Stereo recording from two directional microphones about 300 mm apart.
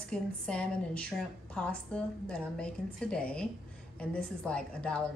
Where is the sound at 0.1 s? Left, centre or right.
Centre.